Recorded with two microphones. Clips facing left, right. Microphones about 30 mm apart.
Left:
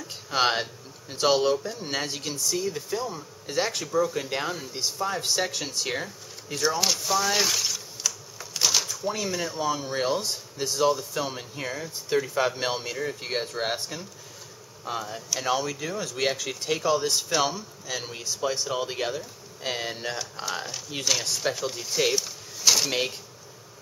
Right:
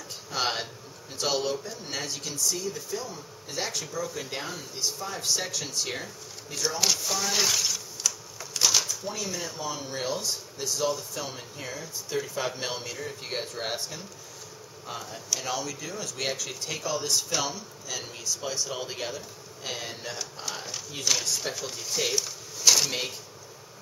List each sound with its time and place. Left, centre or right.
0.3 s speech: left
4.7 s speech: left
5.0 s speech: left
6.8 s a sound: centre
9.1 s speech: left
9.8 s speech: left
10.9 s speech: left
15.4 s speech: left
20.4 s speech: centre
22.8 s speech: left